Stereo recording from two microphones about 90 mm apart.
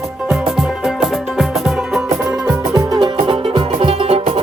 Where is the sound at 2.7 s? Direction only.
45° right (ahead or behind); by 4.4 s 90° right.